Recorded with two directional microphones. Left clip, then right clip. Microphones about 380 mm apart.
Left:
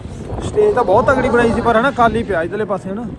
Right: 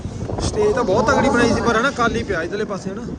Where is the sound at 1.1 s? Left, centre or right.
Right.